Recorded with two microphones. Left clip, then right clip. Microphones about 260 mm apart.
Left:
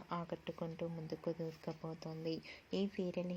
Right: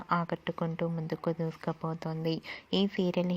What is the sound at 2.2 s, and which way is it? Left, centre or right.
Speech, right.